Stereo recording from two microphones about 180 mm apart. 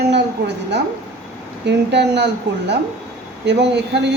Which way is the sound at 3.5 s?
70° right (ahead or behind).